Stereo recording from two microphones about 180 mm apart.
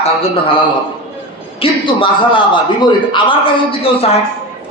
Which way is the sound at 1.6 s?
30° left (ahead or behind).